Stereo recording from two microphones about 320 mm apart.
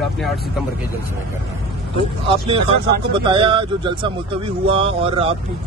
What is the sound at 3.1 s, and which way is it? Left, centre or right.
Speech, centre.